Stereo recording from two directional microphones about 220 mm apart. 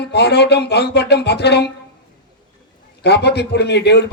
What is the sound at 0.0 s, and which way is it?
A man's voice, 50° left (ahead or behind).